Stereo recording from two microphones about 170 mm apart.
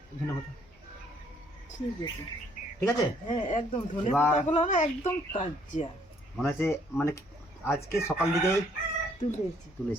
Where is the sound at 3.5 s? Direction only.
40° left (ahead or behind).